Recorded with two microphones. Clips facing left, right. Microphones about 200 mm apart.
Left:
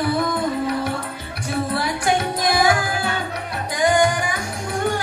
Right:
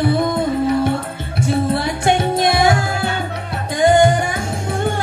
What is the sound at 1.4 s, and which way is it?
Music, 25° right (ahead or behind).